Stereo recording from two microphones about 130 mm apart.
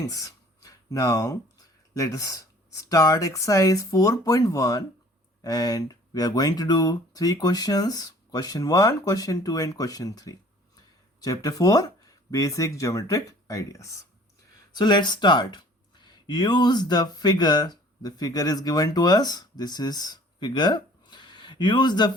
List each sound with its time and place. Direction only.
0.0 s speech: 25° left (ahead or behind)
14.8 s speech: 35° left (ahead or behind)